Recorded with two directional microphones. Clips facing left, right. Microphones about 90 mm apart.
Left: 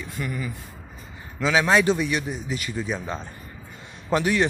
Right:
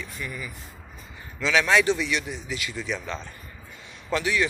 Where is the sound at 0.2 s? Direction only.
25° left (ahead or behind).